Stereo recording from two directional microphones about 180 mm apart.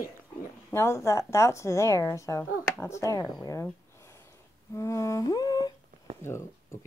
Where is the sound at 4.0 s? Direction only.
15° left (ahead or behind).